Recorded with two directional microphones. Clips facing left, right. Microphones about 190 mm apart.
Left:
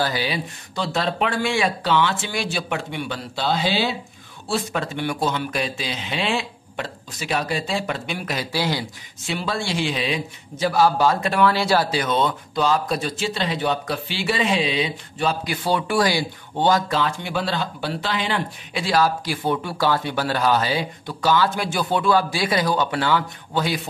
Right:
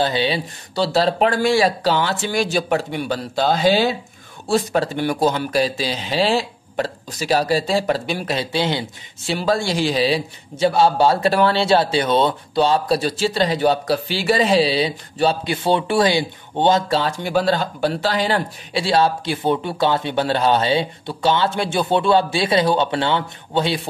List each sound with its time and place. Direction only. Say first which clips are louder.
0.0 s speech: right 4 dB; 25° right (ahead or behind)